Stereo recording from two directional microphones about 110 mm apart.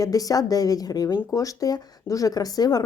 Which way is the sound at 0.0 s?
35° left (ahead or behind).